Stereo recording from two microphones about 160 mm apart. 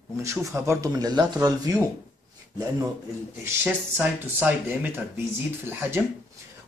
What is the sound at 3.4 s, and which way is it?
Speech, 10° right (ahead or behind).